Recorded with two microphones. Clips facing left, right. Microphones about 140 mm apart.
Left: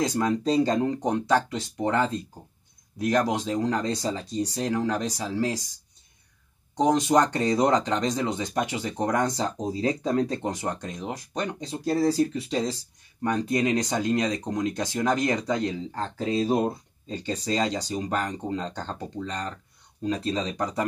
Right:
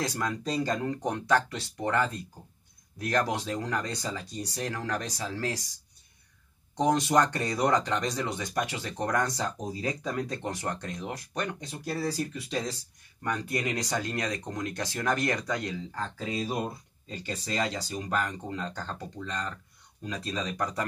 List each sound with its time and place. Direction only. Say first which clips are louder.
0.0 s speech: left 7 dB; 20° left (ahead or behind)
6.8 s speech: left 3 dB; 20° left (ahead or behind)